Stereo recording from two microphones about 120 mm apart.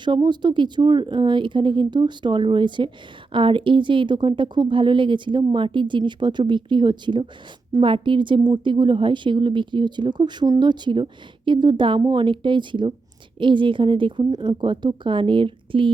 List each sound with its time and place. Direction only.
0.0 s a woman's voice: 40° right (ahead or behind)